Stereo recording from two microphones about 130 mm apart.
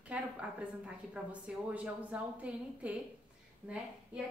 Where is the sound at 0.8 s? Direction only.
10° right (ahead or behind).